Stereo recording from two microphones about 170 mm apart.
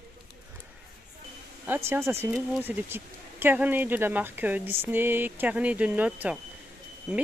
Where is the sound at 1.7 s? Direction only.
15° right (ahead or behind).